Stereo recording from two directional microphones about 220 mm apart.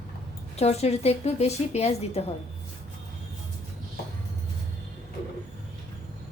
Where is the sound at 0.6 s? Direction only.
30° left (ahead or behind).